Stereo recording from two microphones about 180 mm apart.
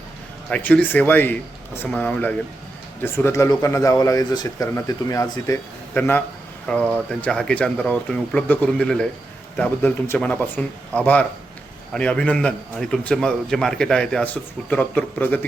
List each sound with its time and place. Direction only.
0.5 s a man's voice: 10° left (ahead or behind)